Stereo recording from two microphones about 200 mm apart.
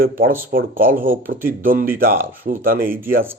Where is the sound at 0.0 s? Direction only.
45° right (ahead or behind).